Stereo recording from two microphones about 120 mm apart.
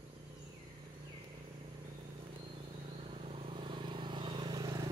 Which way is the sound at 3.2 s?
50° right (ahead or behind).